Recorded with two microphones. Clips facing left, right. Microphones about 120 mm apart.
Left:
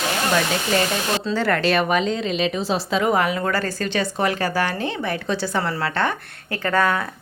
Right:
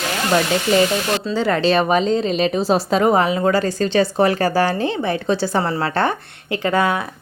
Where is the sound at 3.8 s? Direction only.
30° right (ahead or behind).